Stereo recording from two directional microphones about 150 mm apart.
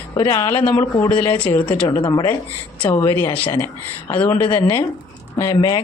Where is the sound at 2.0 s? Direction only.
25° left (ahead or behind).